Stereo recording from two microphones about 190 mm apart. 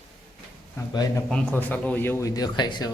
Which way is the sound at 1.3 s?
5° left (ahead or behind).